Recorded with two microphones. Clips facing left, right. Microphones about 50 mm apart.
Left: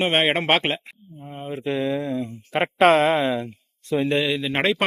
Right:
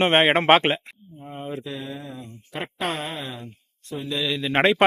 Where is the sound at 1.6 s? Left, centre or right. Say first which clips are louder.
Left 10 dB; left.